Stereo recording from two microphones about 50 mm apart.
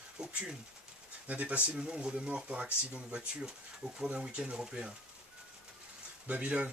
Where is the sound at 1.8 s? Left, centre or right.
Centre.